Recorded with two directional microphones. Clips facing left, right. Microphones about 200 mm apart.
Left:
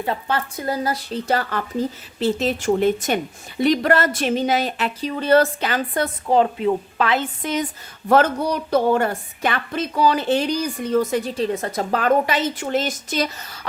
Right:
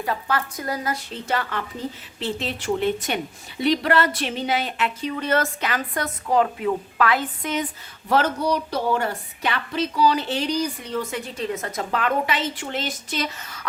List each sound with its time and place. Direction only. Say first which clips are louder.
0.0 s a woman's voice: left 2 dB; 25° left (ahead or behind)
8.1 s a woman's voice: left 4 dB; 50° left (ahead or behind); by 13.7 s 35° left (ahead or behind)